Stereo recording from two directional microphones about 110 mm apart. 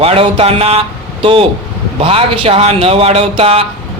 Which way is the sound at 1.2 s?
55° right (ahead or behind).